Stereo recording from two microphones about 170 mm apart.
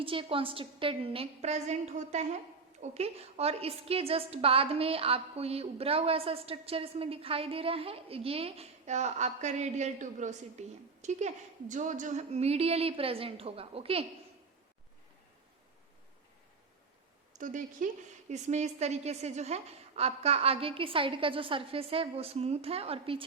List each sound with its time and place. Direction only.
0.0 s a woman's voice: 30° right (ahead or behind)
17.3 s a woman's voice: 50° right (ahead or behind)